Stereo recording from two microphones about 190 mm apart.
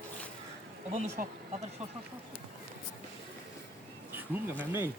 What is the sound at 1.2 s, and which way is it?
Speech, 45° right (ahead or behind).